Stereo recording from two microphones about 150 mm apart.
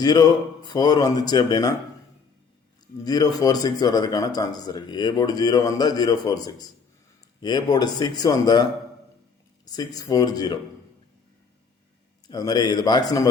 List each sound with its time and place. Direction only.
0.0 s speech: 25° left (ahead or behind)
3.0 s speech: 25° left (ahead or behind)
9.6 s speech: 25° left (ahead or behind)
12.3 s speech: 25° left (ahead or behind)